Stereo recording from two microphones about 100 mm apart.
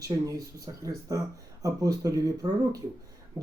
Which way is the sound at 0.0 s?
35° right (ahead or behind).